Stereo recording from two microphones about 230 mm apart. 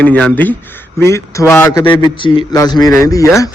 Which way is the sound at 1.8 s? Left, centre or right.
Left.